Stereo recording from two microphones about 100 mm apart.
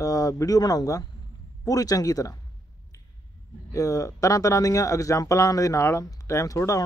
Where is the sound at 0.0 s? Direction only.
35° left (ahead or behind).